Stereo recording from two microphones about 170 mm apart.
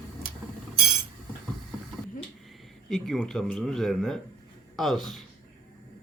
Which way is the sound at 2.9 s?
Centre (ahead or behind).